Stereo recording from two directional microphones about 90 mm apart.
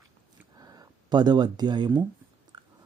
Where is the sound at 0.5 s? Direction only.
45° right (ahead or behind).